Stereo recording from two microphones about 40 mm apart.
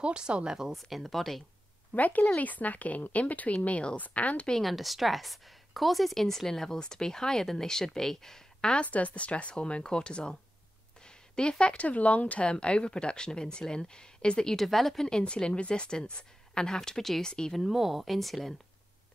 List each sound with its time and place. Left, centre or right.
0.0 s speech: right
0.5 s a woman's voice: centre
0.7 s speech: centre
2.0 s speech: left
4.6 s speech: centre
8.8 s speech: left
14.5 s speech: centre
15.0 s speech: left
17.6 s speech: centre